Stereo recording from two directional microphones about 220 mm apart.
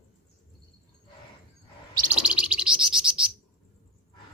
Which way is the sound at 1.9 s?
5° right (ahead or behind).